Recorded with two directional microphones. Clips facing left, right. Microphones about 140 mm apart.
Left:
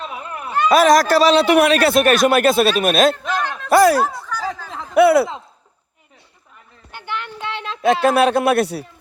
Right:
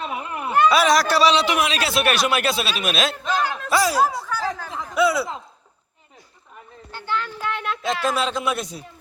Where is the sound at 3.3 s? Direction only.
5° right (ahead or behind).